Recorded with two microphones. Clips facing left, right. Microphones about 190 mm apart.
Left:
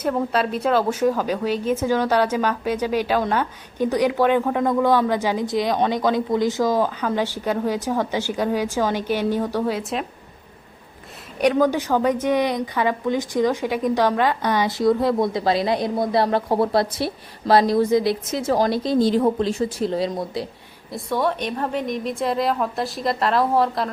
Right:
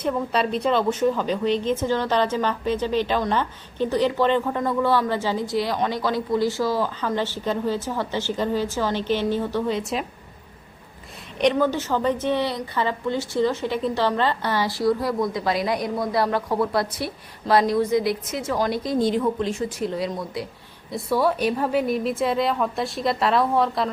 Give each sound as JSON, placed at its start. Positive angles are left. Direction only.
{"t": 0.0, "sound": "a woman's voice", "side_deg": 5}
{"t": 11.3, "sound": "a woman's voice", "side_deg": 10}
{"t": 20.9, "sound": "a woman's voice", "side_deg": -5}